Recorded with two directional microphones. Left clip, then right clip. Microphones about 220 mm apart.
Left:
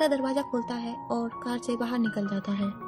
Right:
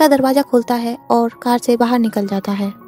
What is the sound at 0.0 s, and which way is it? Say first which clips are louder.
A woman's voice: right 14 dB; 40° right (ahead or behind).